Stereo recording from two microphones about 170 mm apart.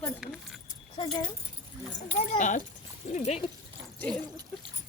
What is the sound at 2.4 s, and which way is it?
Speech, 45° left (ahead or behind).